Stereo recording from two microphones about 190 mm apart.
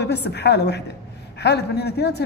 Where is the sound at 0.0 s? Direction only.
60° left (ahead or behind).